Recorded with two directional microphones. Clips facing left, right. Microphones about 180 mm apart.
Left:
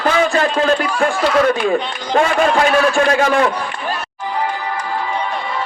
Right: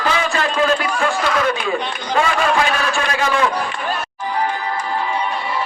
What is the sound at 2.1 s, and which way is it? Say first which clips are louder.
A man's voice: left 3 dB; 50° left (ahead or behind).